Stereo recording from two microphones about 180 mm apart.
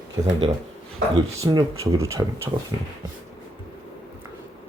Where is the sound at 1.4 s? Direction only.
20° right (ahead or behind).